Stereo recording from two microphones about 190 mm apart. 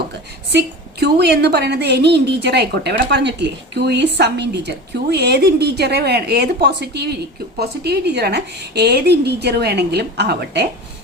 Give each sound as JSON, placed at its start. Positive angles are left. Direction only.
{"t": 0.5, "sound": "a woman's voice", "side_deg": -60}